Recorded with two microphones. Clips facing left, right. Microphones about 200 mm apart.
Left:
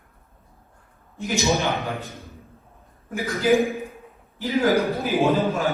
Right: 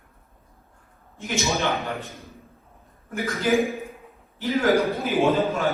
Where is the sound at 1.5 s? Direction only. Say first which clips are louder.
Even; 15° left (ahead or behind).